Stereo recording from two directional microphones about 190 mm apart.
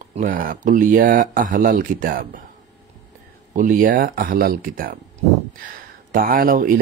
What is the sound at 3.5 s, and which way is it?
Speech, 45° right (ahead or behind).